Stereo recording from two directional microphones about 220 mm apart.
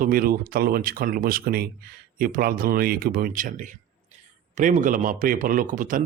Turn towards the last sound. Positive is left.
turn(degrees=-35)  # may be behind; listen again after turning